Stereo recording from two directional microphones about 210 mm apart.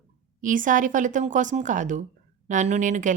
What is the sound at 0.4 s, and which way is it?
A woman's voice, 40° right (ahead or behind).